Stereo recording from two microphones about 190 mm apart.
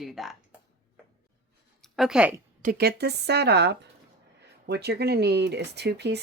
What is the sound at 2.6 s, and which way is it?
Speech, 50° right (ahead or behind).